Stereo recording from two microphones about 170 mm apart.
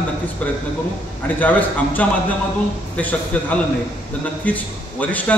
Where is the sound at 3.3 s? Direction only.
10° left (ahead or behind).